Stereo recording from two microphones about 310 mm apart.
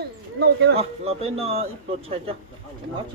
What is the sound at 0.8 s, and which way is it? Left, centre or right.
Speech, centre.